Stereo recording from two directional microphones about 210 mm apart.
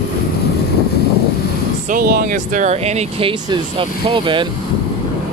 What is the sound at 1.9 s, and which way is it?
Speech, 45° right (ahead or behind).